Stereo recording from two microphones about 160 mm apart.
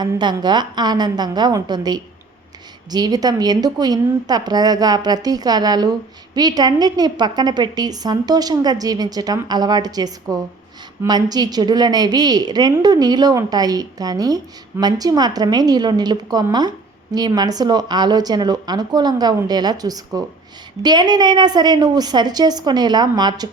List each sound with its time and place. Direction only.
0.0 s a woman's voice: 25° right (ahead or behind)